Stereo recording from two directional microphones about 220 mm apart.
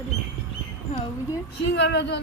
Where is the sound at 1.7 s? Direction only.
50° left (ahead or behind).